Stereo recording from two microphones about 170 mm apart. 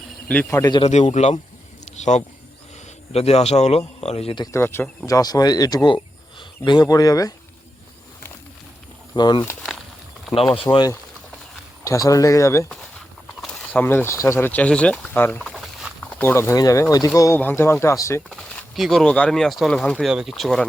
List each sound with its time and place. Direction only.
0.7 s speech: 40° left (ahead or behind)
1.8 s a sound: 40° left (ahead or behind)
3.1 s speech: 35° left (ahead or behind)
4.5 s speech: 15° left (ahead or behind)
9.1 s speech: 25° left (ahead or behind)
9.4 s a sound: 5° left (ahead or behind)
10.5 s speech: 30° left (ahead or behind); by 12.6 s 15° left (ahead or behind)
13.4 s mechanisms: centre (ahead or behind)
13.7 s speech: 10° left (ahead or behind)
16.2 s speech: 15° left (ahead or behind)
18.3 s speech: 5° left (ahead or behind)